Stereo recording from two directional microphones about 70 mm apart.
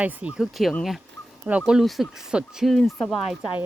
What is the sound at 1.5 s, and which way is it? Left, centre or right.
Speech, centre.